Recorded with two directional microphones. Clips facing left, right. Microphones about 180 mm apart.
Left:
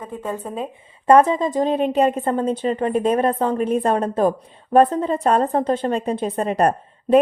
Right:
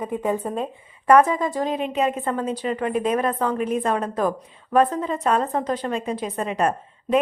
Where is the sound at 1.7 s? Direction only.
35° left (ahead or behind).